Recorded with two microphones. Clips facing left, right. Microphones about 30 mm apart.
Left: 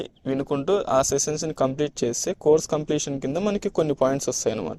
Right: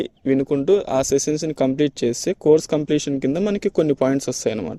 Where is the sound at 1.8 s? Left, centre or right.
Right.